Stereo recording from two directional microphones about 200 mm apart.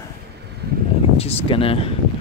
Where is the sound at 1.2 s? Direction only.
30° left (ahead or behind).